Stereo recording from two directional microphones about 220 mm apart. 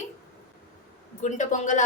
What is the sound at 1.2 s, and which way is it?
Speech, 35° left (ahead or behind).